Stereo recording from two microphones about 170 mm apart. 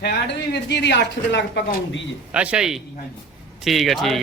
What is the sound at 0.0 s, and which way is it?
Speech, 80° left.